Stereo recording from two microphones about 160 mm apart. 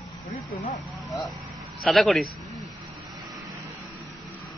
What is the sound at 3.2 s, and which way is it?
Vehicle, 25° right (ahead or behind).